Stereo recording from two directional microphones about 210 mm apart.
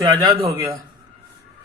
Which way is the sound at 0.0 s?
20° right (ahead or behind).